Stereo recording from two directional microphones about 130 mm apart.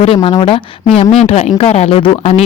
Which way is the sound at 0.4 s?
45° left (ahead or behind).